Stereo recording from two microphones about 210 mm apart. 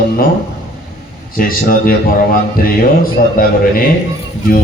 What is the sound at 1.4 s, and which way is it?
A man's voice, 40° left (ahead or behind).